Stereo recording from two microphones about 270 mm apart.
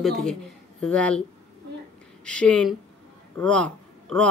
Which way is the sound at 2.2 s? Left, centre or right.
Centre.